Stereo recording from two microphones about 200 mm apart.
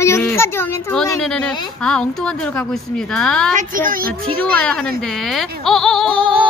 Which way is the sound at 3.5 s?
45° right (ahead or behind).